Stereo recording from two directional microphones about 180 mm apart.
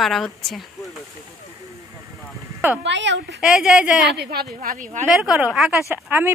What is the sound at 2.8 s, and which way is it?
Speech, 80° right.